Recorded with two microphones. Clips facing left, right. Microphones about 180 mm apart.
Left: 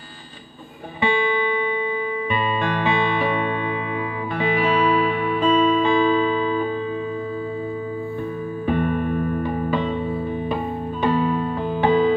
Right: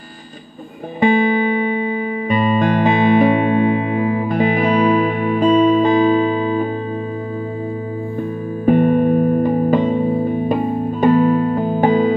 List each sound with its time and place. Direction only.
1.0 s music: 45° right (ahead or behind)
8.6 s music: 45° right (ahead or behind)